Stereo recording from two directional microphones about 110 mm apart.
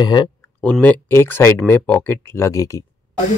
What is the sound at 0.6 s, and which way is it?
A man's voice, 15° left (ahead or behind).